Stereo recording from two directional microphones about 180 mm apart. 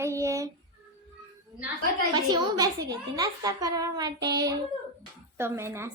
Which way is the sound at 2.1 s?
25° right (ahead or behind).